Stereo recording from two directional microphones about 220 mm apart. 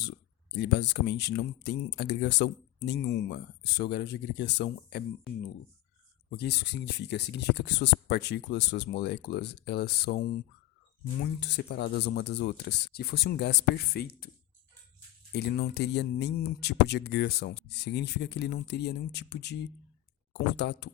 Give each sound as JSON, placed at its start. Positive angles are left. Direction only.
{"t": 0.6, "sound": "speech", "side_deg": 50}
{"t": 6.3, "sound": "speech", "side_deg": 50}
{"t": 11.2, "sound": "speech", "side_deg": 50}
{"t": 15.3, "sound": "speech", "side_deg": 50}